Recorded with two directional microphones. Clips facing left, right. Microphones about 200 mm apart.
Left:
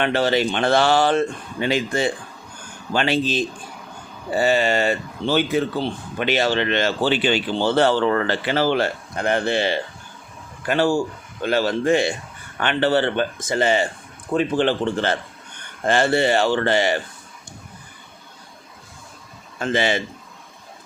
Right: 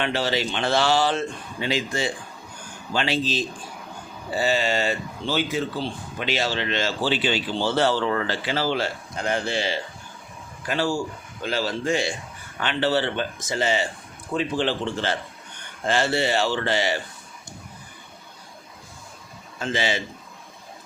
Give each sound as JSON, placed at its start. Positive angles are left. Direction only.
{"t": 0.0, "sound": "speech", "side_deg": 55}
{"t": 19.5, "sound": "speech", "side_deg": 55}